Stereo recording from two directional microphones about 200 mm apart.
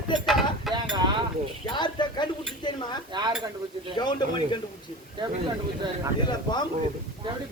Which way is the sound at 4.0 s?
20° left (ahead or behind).